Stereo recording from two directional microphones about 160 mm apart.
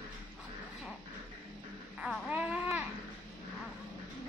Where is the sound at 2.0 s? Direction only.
5° right (ahead or behind).